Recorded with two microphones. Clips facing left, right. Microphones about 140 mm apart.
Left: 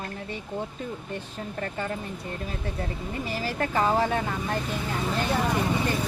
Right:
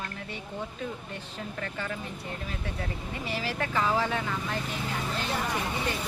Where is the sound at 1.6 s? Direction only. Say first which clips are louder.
Left 5 dB; 40° left (ahead or behind).